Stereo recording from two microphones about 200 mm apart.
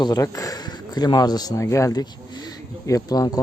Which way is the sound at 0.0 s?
20° left (ahead or behind).